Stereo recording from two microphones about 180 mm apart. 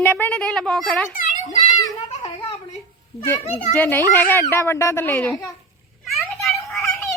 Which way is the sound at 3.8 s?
10° left (ahead or behind).